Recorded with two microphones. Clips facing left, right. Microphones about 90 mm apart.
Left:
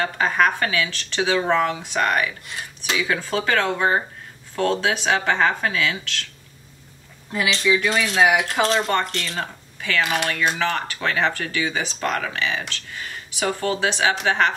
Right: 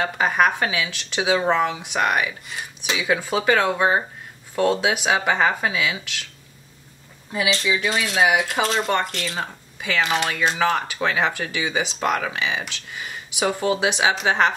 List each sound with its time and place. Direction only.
0.0 s speech: 15° right (ahead or behind)
7.4 s speech: 5° right (ahead or behind)
9.8 s speech: 15° right (ahead or behind)